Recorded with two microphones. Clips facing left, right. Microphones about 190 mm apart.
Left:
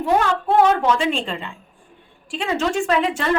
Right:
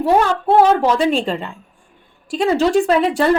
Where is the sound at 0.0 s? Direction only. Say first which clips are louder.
Right 4 dB; 35° right (ahead or behind).